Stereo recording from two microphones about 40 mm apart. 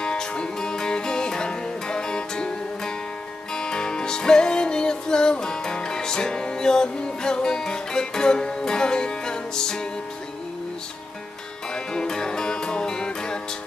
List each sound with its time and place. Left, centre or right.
0.0 s music: left
11.7 s music: centre